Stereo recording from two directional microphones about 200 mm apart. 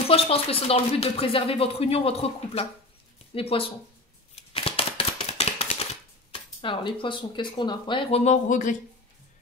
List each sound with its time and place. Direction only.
0.1 s speech: 30° left (ahead or behind)
4.4 s a sound: 30° left (ahead or behind)
6.6 s speech: 25° left (ahead or behind); by 8.7 s 40° left (ahead or behind)